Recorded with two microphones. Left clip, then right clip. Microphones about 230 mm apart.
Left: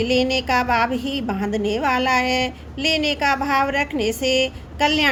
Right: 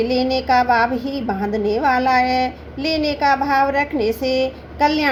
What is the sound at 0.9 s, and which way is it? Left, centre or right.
Speech, left.